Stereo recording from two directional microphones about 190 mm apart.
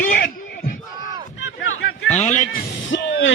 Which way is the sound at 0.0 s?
45° left (ahead or behind).